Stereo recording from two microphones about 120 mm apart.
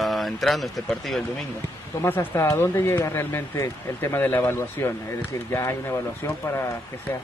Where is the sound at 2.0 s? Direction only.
20° left (ahead or behind).